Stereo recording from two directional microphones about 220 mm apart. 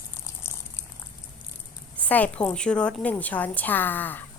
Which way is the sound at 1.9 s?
5° left (ahead or behind).